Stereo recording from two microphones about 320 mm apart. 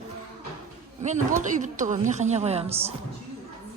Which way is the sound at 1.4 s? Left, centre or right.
Right.